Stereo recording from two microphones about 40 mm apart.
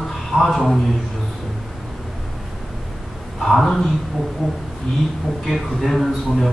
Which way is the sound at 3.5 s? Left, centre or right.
Centre.